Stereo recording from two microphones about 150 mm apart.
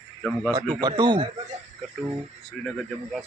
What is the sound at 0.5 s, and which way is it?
Speech, 30° right (ahead or behind).